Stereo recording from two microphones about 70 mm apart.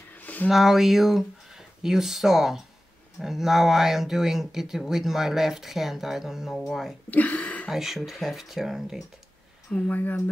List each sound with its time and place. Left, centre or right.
0.1 s a sound: left
0.5 s speech: centre
7.1 s throat clearing: left
7.7 s speech: centre
9.7 s speech: left